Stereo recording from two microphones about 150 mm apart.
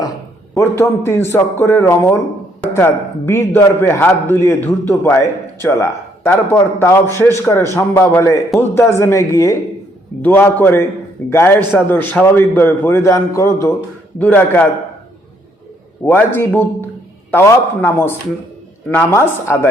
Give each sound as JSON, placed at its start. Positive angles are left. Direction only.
{"t": 0.5, "sound": "a man's voice", "side_deg": 15}
{"t": 16.0, "sound": "a man's voice", "side_deg": 15}